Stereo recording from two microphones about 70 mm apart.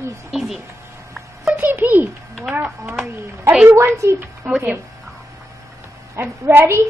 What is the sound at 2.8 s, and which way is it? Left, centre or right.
Speech, centre.